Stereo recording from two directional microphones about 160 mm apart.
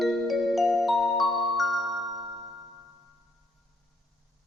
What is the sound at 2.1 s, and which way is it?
Music, 25° right (ahead or behind).